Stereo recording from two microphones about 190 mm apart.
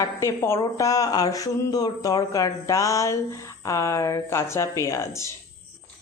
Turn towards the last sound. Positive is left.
turn(degrees=15)  # may be behind; listen again after turning